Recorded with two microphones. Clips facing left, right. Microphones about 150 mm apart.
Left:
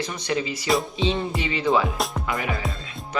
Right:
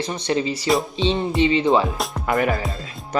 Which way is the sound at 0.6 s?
Centre (ahead or behind).